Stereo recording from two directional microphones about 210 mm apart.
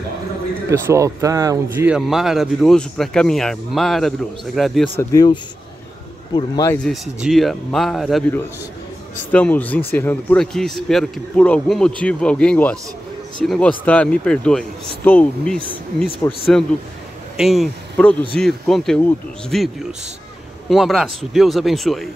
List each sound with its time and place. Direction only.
0.7 s speech: 15° right (ahead or behind)
5.1 s a man's voice: 20° left (ahead or behind)
6.9 s speech: centre (ahead or behind)
17.4 s speech: centre (ahead or behind)
20.6 s speech: centre (ahead or behind)